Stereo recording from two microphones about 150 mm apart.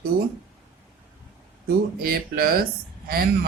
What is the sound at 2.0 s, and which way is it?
Speech, 85° right.